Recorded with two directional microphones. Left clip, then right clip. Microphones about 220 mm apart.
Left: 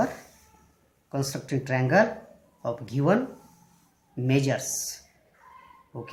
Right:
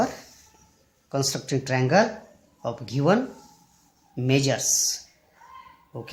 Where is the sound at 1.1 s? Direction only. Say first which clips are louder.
Right 4 dB; 30° right (ahead or behind).